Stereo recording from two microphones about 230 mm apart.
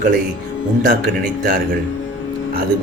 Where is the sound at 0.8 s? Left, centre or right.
Right.